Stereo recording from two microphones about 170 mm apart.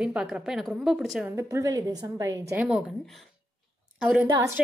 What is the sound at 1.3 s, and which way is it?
A woman's voice, 20° right (ahead or behind).